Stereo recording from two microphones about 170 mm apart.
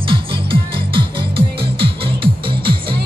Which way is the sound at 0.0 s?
30° right (ahead or behind).